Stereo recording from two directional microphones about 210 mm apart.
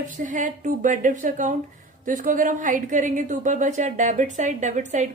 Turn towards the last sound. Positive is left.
turn(degrees=-35)  # may be behind; listen again after turning